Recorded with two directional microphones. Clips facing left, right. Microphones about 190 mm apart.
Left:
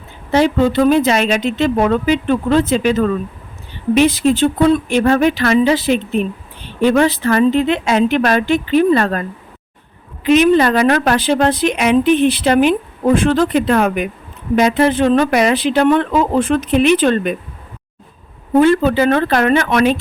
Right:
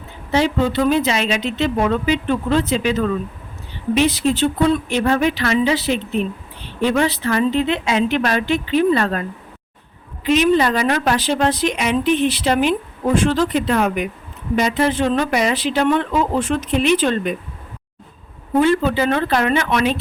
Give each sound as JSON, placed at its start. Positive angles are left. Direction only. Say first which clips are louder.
{"t": 0.3, "sound": "speech", "louder": "left 4 dB", "side_deg": 50}
{"t": 10.2, "sound": "speech", "louder": "left 4 dB", "side_deg": 55}
{"t": 18.6, "sound": "speech", "louder": "left 4 dB", "side_deg": 50}